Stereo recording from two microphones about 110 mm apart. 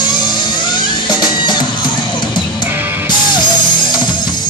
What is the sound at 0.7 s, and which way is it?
Music, 45° left (ahead or behind).